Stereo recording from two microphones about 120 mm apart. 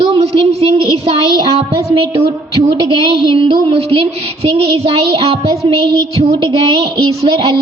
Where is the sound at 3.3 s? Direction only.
50° right (ahead or behind).